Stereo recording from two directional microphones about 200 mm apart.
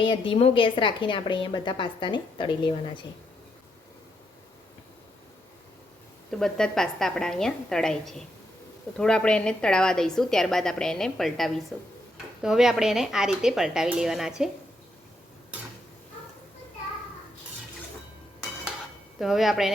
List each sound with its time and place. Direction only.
0.0 s a woman's voice: 25° left (ahead or behind)
6.4 s a woman's voice: 5° left (ahead or behind)
19.2 s a woman's voice: centre (ahead or behind)